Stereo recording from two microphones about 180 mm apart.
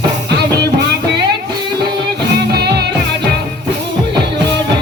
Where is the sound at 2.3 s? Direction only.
65° right (ahead or behind).